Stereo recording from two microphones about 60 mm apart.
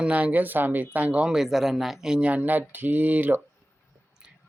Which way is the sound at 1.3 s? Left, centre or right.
Centre.